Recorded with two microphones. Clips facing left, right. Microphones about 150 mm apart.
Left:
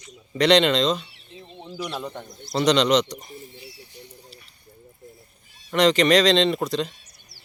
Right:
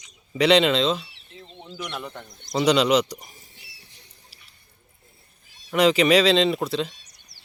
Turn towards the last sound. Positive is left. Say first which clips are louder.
# even
turn(degrees=0)  # may be behind; listen again after turning